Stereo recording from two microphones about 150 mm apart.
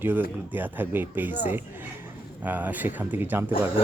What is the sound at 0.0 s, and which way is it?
Speech, 15° right (ahead or behind).